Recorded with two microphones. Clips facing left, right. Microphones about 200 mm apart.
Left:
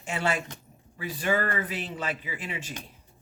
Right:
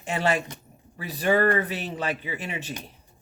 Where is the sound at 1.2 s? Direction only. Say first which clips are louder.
Right 6 dB; 35° right (ahead or behind).